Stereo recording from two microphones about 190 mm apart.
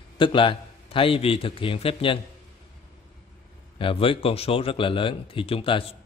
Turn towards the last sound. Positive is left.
turn(degrees=30)  # may be behind; listen again after turning